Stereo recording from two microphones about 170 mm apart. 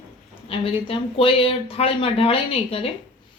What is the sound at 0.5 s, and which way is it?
Speech, 35° left (ahead or behind).